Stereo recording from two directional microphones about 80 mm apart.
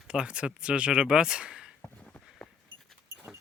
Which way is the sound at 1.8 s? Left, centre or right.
Centre.